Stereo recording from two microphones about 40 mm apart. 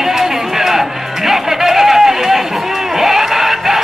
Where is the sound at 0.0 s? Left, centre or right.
Centre.